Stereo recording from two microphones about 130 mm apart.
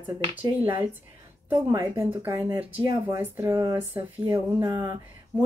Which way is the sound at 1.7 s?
20° right (ahead or behind).